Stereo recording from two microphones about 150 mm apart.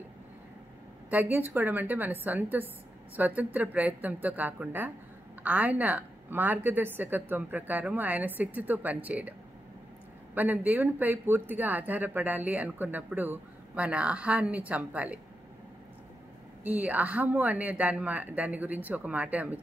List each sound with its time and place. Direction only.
1.1 s speech: 15° right (ahead or behind)
10.3 s speech: 10° right (ahead or behind)
16.6 s speech: 10° right (ahead or behind)